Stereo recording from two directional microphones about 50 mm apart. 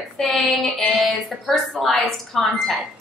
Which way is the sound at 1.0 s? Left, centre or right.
Centre.